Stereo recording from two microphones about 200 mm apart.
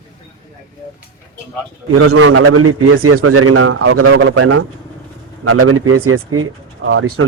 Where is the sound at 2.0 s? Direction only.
90° right.